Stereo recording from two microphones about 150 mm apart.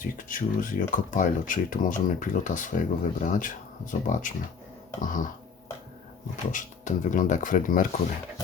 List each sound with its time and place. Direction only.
0.0 s speech: 60° left (ahead or behind)
6.5 s speech: 60° left (ahead or behind)